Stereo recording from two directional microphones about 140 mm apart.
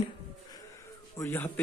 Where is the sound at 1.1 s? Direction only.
15° left (ahead or behind).